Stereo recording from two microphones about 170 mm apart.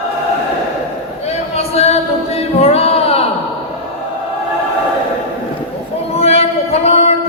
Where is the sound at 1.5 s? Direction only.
40° left (ahead or behind).